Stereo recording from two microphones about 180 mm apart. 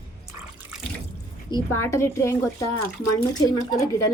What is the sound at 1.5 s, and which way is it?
A woman's voice, 15° left (ahead or behind).